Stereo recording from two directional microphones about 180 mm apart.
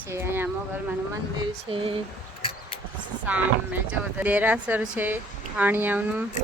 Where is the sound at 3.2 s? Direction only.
10° right (ahead or behind).